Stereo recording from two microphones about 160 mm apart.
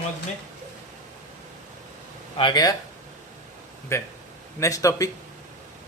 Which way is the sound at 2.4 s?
25° left (ahead or behind).